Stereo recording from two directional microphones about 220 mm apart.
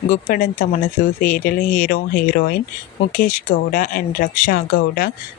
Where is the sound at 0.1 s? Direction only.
35° left (ahead or behind).